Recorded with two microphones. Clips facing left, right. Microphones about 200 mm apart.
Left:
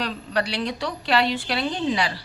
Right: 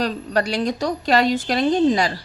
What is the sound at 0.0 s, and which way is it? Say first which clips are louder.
A woman's voice: right 5 dB; 45° right (ahead or behind).